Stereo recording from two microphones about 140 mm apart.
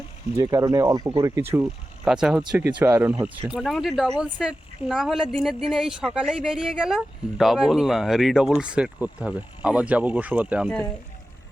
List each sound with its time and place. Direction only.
0.3 s speech: 25° right (ahead or behind)
2.0 s a woman's voice: 5° right (ahead or behind)
3.5 s a woman's voice: 5° right (ahead or behind)